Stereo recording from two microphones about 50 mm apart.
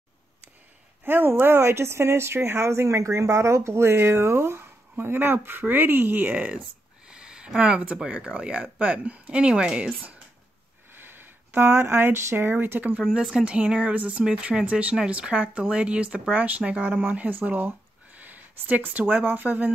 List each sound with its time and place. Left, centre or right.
1.0 s speech: right
1.6 s speech: right
7.1 s a sound: centre
8.0 s speech: centre
11.0 s speech: right
12.5 s speech: right
13.3 s speech: right